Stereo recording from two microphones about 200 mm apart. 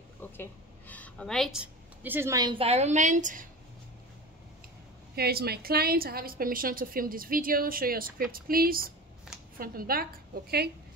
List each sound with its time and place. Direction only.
0.2 s a woman's voice: 10° left (ahead or behind); by 3.4 s 40° right (ahead or behind)
5.1 s a woman's voice: 50° right (ahead or behind)